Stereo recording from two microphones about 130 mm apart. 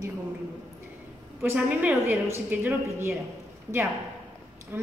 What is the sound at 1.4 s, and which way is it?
A woman's voice, 15° right (ahead or behind).